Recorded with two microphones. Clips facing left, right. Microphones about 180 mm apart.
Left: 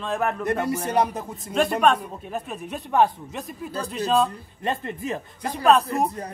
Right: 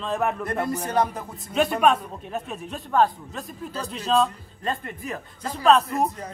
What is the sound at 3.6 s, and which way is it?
Speech, 5° left (ahead or behind).